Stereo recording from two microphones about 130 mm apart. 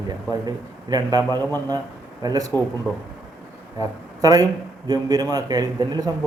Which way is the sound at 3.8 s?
25° right (ahead or behind).